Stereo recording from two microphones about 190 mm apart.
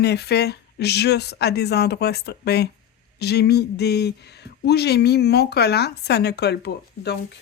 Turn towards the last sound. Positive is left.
turn(degrees=60)  # may be behind; listen again after turning